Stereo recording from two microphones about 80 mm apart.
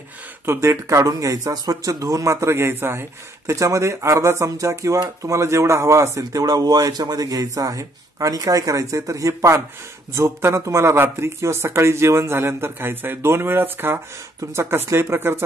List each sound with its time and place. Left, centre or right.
0.5 s speech: right